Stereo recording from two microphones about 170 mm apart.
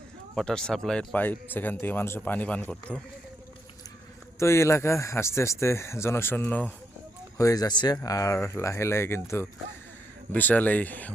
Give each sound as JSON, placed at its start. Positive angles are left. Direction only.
{"t": 0.3, "sound": "speech", "side_deg": 5}
{"t": 4.4, "sound": "speech", "side_deg": 15}
{"t": 7.3, "sound": "speech", "side_deg": 20}